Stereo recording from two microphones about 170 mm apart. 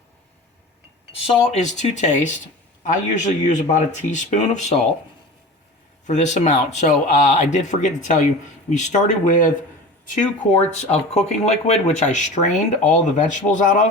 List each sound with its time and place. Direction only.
1.3 s speech: 40° left (ahead or behind)
6.1 s speech: 45° left (ahead or behind)
10.8 s speech: 40° left (ahead or behind)